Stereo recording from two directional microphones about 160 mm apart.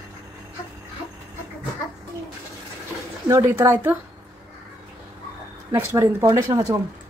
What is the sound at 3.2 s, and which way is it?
Speech, 15° right (ahead or behind).